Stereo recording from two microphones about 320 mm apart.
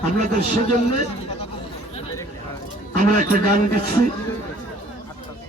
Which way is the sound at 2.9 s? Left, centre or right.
Right.